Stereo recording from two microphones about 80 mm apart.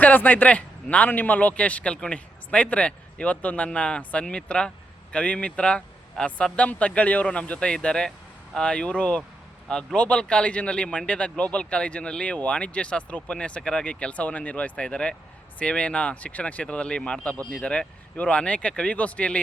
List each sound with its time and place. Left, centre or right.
0.0 s speech: left